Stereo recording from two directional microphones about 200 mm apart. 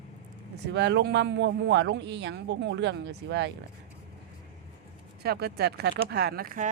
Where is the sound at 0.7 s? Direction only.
60° right (ahead or behind).